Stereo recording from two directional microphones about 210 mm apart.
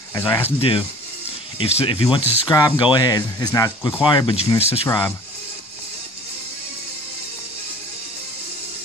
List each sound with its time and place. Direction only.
0.1 s speech: 15° left (ahead or behind)
4.8 s speech: 10° left (ahead or behind)